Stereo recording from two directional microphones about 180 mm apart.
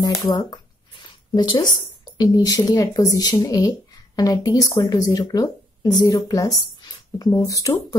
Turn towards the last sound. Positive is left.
turn(degrees=20)  # may be behind; listen again after turning